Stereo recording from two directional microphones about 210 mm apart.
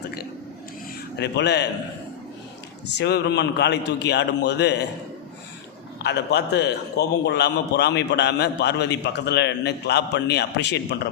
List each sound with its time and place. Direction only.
1.2 s speech: 55° left (ahead or behind)
3.0 s a man's voice: 55° left (ahead or behind)
6.0 s a man's voice: 55° left (ahead or behind)